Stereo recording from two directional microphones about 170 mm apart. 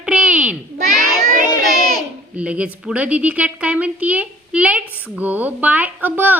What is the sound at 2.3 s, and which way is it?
A woman's voice, 5° right (ahead or behind).